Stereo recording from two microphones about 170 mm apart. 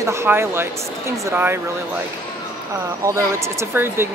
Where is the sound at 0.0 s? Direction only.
15° right (ahead or behind).